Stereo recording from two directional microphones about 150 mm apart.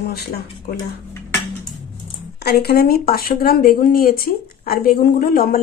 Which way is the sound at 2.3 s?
90° left.